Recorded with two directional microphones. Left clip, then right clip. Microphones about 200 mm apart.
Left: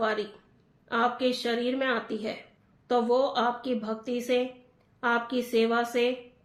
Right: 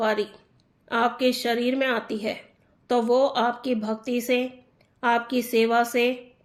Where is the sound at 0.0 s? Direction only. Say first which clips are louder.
Right 4 dB; 40° right (ahead or behind).